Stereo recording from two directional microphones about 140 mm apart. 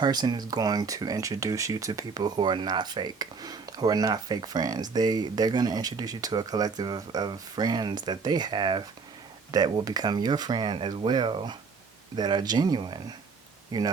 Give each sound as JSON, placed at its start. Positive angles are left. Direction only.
{"t": 0.0, "sound": "speech", "side_deg": -30}